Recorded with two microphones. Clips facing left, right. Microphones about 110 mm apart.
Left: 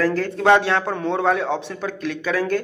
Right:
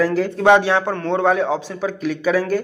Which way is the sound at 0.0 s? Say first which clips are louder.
Right 3 dB; 10° right (ahead or behind).